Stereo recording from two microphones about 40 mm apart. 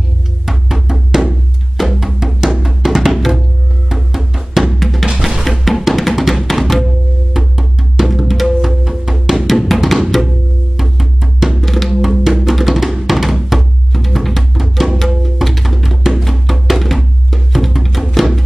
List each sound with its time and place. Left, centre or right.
0.5 s music: centre